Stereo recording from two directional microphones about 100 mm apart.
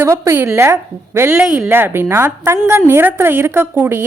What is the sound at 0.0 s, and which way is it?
A woman's voice, 25° right (ahead or behind).